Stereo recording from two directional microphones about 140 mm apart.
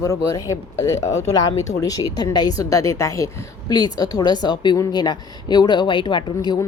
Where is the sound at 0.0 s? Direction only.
25° left (ahead or behind).